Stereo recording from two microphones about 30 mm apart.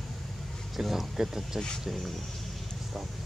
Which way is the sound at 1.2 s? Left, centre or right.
Centre.